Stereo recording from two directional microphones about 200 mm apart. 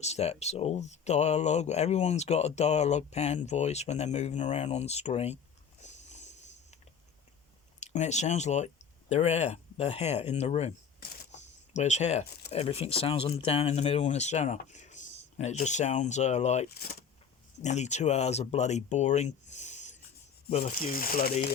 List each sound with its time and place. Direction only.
0.0 s speech: 30° left (ahead or behind)
5.8 s a sound: 35° left (ahead or behind)
7.8 s speech: 35° left (ahead or behind)
11.3 s a sound: 35° left (ahead or behind)
12.5 s speech: 30° left (ahead or behind)
20.7 s speech: 45° left (ahead or behind)